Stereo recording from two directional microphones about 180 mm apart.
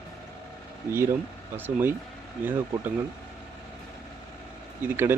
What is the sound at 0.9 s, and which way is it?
Speech, 15° right (ahead or behind).